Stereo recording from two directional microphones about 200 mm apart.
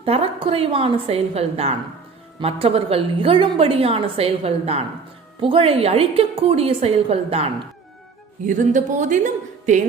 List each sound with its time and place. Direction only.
0.0 s a woman's voice: 30° right (ahead or behind)